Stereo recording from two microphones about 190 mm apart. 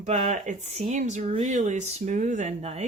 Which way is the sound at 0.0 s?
40° right (ahead or behind).